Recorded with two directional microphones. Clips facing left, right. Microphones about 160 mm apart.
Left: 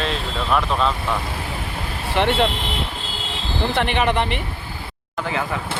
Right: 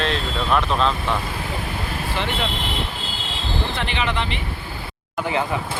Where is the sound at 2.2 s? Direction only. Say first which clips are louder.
Left 9 dB; 65° left (ahead or behind).